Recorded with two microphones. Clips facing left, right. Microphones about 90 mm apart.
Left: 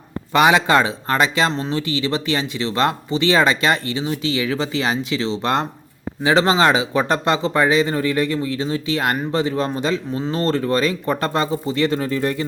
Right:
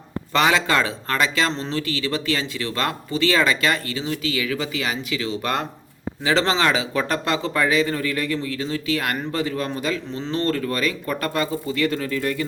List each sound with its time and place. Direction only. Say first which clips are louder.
0.3 s speech: left 5 dB; 20° left (ahead or behind)
10.1 s speech: left 5 dB; 10° left (ahead or behind)
10.3 s speech: left 3 dB; 25° left (ahead or behind)